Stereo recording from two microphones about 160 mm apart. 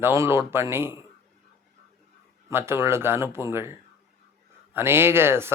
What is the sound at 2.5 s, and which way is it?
Speech, 15° right (ahead or behind).